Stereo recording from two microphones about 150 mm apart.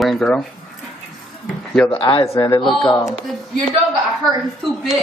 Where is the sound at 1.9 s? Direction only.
35° left (ahead or behind).